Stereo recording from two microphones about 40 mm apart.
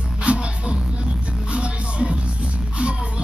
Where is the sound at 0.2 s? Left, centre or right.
Right.